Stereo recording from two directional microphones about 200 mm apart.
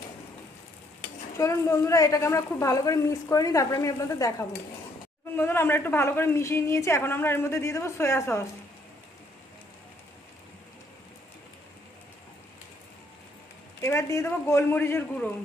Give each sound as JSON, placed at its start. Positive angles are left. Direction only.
{"t": 1.4, "sound": "a woman's voice", "side_deg": 15}
{"t": 13.8, "sound": "a woman's voice", "side_deg": 15}